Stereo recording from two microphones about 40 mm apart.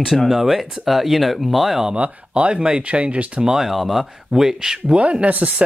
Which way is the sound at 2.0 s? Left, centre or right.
Right.